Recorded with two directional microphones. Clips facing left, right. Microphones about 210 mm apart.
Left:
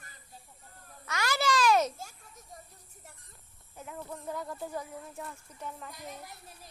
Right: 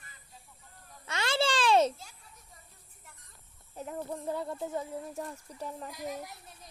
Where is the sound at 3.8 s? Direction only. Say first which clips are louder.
Right 5 dB; 35° right (ahead or behind).